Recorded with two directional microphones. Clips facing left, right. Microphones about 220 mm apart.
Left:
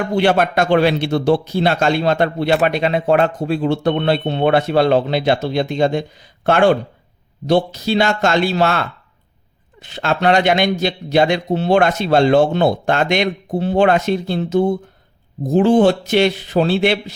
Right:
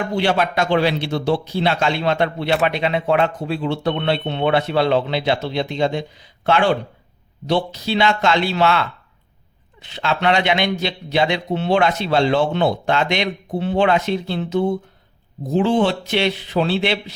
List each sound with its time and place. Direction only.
0.2 s a man's voice: 50° left (ahead or behind)